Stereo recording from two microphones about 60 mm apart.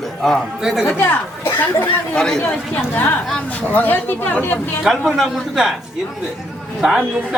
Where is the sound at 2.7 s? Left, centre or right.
Left.